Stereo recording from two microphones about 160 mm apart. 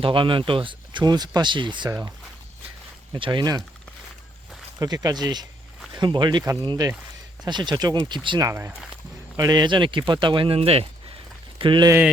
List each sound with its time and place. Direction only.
0.0 s speech: 30° right (ahead or behind)
4.8 s speech: 25° right (ahead or behind)
8.4 s speech: 15° right (ahead or behind)